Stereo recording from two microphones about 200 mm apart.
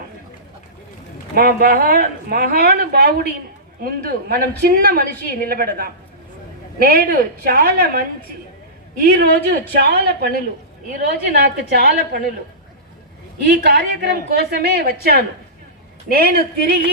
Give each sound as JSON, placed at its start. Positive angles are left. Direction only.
{"t": 1.4, "sound": "speech", "side_deg": -50}
{"t": 13.5, "sound": "speech", "side_deg": -55}